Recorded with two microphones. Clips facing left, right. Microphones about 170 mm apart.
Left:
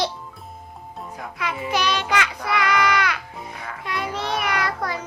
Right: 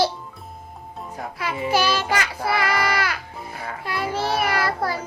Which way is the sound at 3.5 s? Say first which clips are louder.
Right 2 dB; 35° right (ahead or behind).